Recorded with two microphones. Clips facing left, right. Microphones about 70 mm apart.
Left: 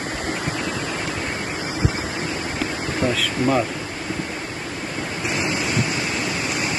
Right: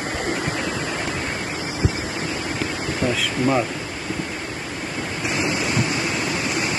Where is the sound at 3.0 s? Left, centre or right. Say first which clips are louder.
Left 1 dB; centre.